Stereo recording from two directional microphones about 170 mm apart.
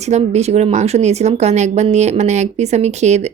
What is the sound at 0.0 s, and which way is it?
A woman's voice, 40° right (ahead or behind).